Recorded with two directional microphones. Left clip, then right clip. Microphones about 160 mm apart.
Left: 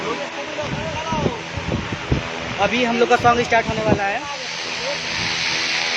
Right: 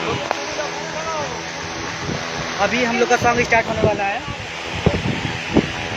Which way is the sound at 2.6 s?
15° left (ahead or behind).